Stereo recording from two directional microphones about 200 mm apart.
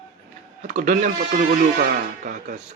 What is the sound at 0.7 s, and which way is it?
Speech, 40° right (ahead or behind).